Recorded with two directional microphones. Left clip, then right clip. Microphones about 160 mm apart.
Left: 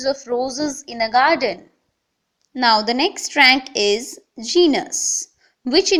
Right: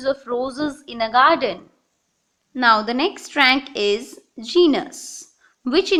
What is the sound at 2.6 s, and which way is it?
A woman's voice, 25° left (ahead or behind).